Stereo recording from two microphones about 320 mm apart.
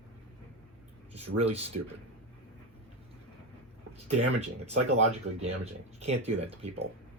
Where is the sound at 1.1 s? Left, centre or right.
Centre.